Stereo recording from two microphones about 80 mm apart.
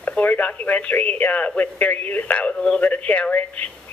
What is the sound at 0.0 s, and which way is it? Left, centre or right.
Speech, centre.